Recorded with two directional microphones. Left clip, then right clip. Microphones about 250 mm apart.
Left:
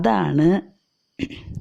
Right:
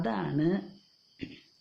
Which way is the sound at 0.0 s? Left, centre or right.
Left.